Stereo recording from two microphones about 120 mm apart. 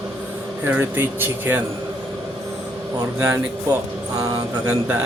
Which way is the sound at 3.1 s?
20° right (ahead or behind).